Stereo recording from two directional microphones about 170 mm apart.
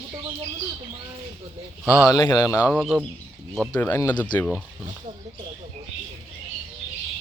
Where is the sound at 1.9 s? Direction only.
20° left (ahead or behind).